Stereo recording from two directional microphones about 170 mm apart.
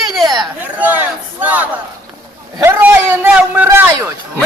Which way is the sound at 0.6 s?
10° right (ahead or behind).